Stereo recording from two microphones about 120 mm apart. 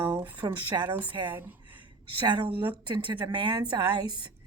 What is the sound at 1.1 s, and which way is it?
A woman's voice, 40° right (ahead or behind).